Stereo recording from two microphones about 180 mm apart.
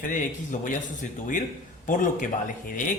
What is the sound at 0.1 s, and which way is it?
Speech, 45° left (ahead or behind).